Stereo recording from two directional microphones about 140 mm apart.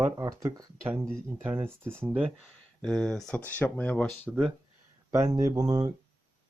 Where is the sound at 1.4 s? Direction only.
15° right (ahead or behind); by 3.4 s 5° left (ahead or behind).